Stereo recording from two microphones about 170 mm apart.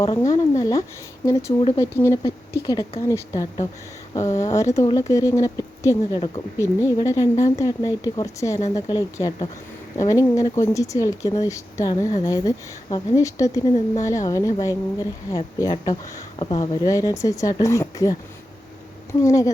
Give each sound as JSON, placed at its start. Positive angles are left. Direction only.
{"t": 0.2, "sound": "speech", "side_deg": 20}
{"t": 19.2, "sound": "speech", "side_deg": 20}